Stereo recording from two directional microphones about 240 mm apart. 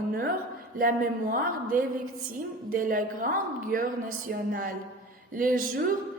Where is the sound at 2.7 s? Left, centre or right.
Right.